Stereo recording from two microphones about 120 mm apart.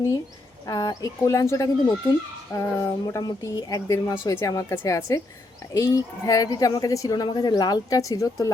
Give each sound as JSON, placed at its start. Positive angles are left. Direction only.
{"t": 0.7, "sound": "a woman's voice", "side_deg": 30}